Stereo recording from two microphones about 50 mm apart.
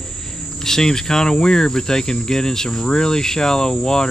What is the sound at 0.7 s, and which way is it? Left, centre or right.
Cricket, centre.